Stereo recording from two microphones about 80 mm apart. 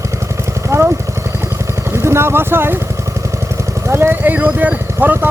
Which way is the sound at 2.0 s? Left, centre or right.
Right.